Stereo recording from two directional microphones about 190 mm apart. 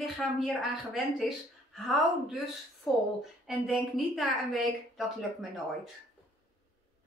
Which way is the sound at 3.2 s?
Centre (ahead or behind).